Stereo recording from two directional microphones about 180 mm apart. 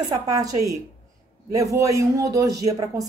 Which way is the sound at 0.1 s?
20° right (ahead or behind).